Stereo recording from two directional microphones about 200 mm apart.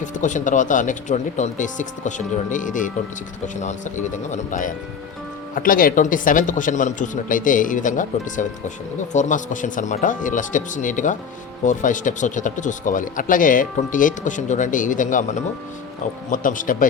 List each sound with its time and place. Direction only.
0.0 s speech: 40° left (ahead or behind)